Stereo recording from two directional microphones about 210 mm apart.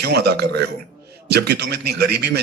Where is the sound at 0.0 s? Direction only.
50° right (ahead or behind).